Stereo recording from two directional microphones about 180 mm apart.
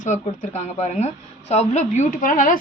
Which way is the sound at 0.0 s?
40° left (ahead or behind).